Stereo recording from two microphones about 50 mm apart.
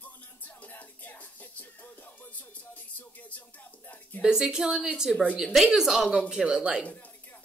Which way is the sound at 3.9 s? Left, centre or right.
Left.